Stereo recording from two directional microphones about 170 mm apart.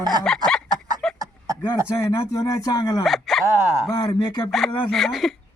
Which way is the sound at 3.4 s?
15° right (ahead or behind).